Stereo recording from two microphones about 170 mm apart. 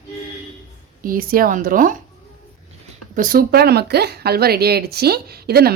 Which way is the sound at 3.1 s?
55° right (ahead or behind).